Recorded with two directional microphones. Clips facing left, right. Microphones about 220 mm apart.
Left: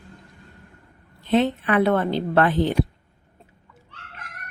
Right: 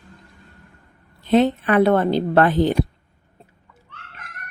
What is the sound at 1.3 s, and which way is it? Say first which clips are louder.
A woman's voice: right 3 dB; 40° right (ahead or behind).